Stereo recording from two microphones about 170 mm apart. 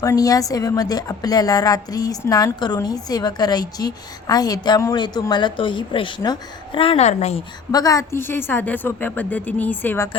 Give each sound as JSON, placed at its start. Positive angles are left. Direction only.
{"t": 0.0, "sound": "a woman's voice", "side_deg": 20}
{"t": 7.7, "sound": "a woman's voice", "side_deg": 20}